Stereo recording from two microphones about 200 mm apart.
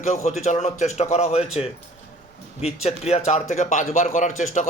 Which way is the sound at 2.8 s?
30° left (ahead or behind).